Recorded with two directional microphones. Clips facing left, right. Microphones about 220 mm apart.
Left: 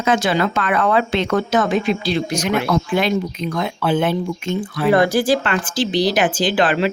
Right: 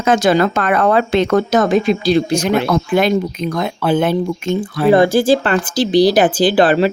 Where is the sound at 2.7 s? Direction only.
45° right (ahead or behind).